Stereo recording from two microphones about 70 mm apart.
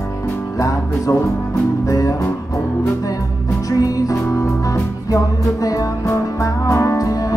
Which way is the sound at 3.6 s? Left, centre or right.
Left.